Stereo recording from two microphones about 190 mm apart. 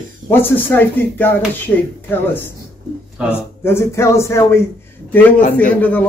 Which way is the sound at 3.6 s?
15° left (ahead or behind).